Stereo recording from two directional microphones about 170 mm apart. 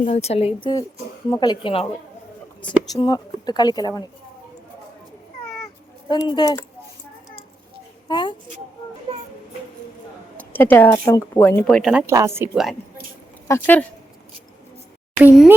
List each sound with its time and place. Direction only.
0.0 s speech: 40° left (ahead or behind)
1.3 s speech: 25° left (ahead or behind)
2.9 s speech: 25° left (ahead or behind)
6.1 s speech: 25° left (ahead or behind)
8.0 s a woman's voice: 25° left (ahead or behind)
10.3 s a sound: 10° left (ahead or behind)
10.9 s speech: 20° left (ahead or behind)
11.9 s a woman's voice: 15° right (ahead or behind)
13.5 s speech: 10° left (ahead or behind)
15.2 s a woman's voice: 10° right (ahead or behind)